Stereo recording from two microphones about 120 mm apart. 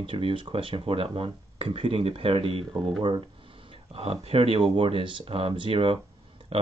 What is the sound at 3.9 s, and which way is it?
Speech, 55° right (ahead or behind).